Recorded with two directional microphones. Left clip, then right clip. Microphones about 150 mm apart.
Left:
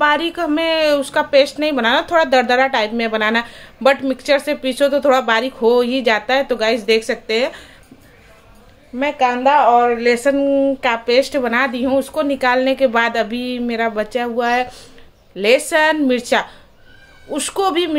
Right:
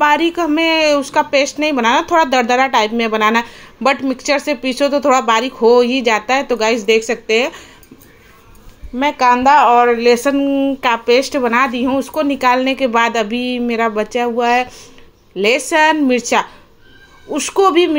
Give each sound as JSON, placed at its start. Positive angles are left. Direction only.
{"t": 0.0, "sound": "speech", "side_deg": -15}
{"t": 8.9, "sound": "a woman's voice", "side_deg": -30}
{"t": 9.7, "sound": "speech", "side_deg": -90}
{"t": 9.9, "sound": "speech", "side_deg": -25}